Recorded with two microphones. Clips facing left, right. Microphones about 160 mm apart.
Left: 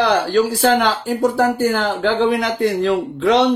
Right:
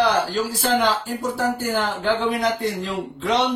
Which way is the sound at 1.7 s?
90° left.